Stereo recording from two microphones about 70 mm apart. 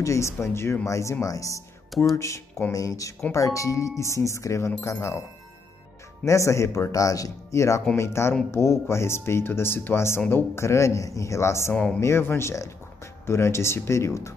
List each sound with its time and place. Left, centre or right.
0.0 s speech: left
6.2 s speech: left
11.7 s speech: centre
12.0 s speech: left